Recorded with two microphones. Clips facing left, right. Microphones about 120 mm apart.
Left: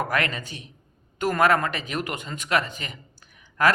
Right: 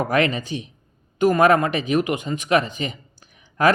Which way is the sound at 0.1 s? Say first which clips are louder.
Right 7 dB; 20° right (ahead or behind).